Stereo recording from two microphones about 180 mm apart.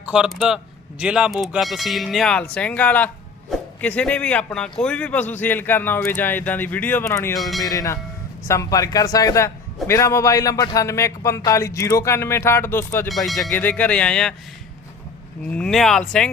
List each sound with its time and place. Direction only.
0.1 s speech: 5° right (ahead or behind); by 7.3 s 15° left (ahead or behind)
7.3 s speech: centre (ahead or behind)
7.6 s speech: 20° left (ahead or behind)
13.1 s speech: centre (ahead or behind)
15.5 s speech: 5° left (ahead or behind)